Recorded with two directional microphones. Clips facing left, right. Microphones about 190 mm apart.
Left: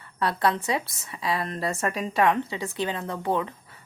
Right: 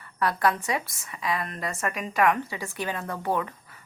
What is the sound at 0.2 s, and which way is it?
A woman's voice, 25° left (ahead or behind).